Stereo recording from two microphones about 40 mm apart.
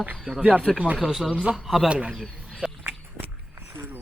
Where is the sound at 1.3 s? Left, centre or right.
Right.